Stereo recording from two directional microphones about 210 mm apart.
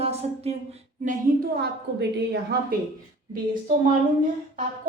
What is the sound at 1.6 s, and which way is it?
Speech, 55° right (ahead or behind).